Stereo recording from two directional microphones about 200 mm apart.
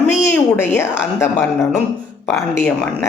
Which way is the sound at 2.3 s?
10° left (ahead or behind).